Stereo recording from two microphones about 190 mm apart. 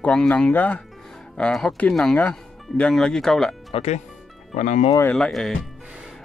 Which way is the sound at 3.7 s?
35° left (ahead or behind).